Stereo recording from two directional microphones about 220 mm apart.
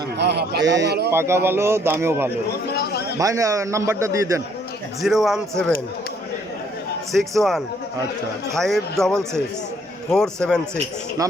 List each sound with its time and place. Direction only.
0.2 s speech: 50° right (ahead or behind)
1.1 s a man's voice: 10° right (ahead or behind)
2.5 s a sound: 45° left (ahead or behind)
3.2 s a man's voice: 15° right (ahead or behind)
5.0 s a man's voice: centre (ahead or behind)
7.1 s a man's voice: centre (ahead or behind)